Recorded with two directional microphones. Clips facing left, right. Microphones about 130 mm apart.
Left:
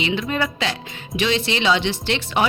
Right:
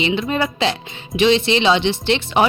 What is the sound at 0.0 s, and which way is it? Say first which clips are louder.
Speech: right 3 dB; 25° right (ahead or behind).